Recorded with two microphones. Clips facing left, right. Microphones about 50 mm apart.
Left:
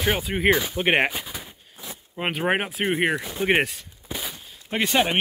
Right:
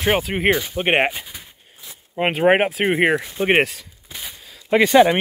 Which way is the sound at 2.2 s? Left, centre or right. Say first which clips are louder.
Right 7 dB; right.